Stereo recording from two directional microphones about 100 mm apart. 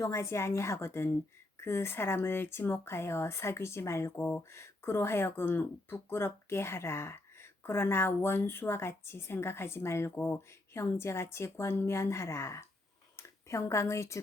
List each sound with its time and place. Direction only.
0.0 s speech: 30° left (ahead or behind)